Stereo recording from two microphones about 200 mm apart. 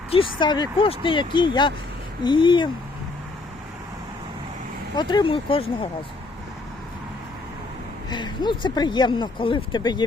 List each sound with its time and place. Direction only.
0.1 s speech: 25° left (ahead or behind)
4.9 s speech: 25° left (ahead or behind)
8.1 s speech: 20° left (ahead or behind)